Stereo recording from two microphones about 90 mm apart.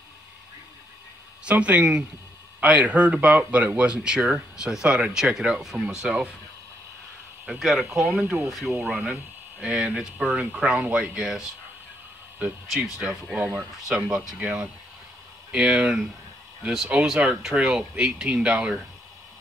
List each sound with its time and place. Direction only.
1.4 s speech: 15° right (ahead or behind)
7.4 s speech: centre (ahead or behind)
8.9 s speech: 15° right (ahead or behind)
9.6 s speech: 5° right (ahead or behind)
12.7 s speech: 10° right (ahead or behind)